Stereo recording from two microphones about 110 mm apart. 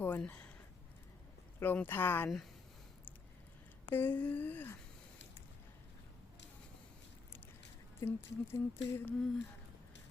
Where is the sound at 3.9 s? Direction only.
20° left (ahead or behind).